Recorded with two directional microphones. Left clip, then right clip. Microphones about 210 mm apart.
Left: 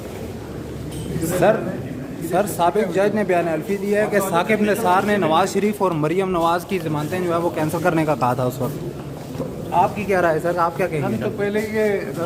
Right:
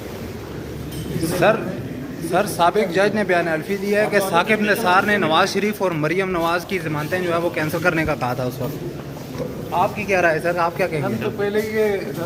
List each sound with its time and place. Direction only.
2.3 s a man's voice: 5° left (ahead or behind); by 8.4 s 25° left (ahead or behind)
10.1 s a man's voice: 10° left (ahead or behind)